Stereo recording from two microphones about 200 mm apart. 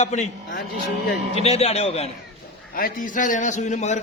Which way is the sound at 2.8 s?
45° left (ahead or behind).